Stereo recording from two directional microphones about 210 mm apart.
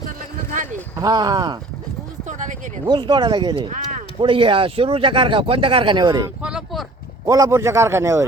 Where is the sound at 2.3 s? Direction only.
35° right (ahead or behind).